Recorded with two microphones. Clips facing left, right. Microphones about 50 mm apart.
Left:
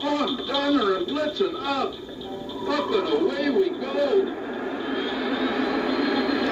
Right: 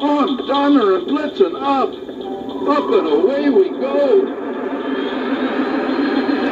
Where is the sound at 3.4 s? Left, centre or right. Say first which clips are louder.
Right 8 dB; centre.